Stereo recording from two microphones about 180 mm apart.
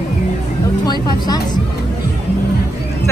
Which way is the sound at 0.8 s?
20° left (ahead or behind).